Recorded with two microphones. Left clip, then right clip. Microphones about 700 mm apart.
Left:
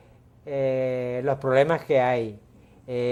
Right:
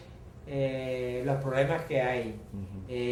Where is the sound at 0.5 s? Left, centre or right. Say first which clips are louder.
Left 7 dB; left.